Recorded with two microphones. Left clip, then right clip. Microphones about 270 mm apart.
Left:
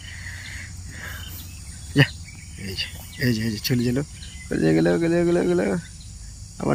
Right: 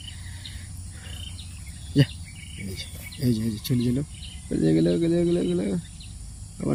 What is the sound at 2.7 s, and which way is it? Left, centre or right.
Speech, centre.